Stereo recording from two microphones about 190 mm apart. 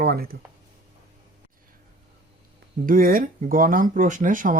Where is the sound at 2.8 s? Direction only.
50° right (ahead or behind).